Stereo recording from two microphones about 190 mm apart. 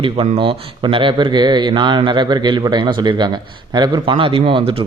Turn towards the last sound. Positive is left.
turn(degrees=-30)  # may be behind; listen again after turning